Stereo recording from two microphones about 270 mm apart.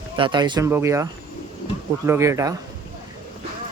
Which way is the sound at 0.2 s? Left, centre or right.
Centre.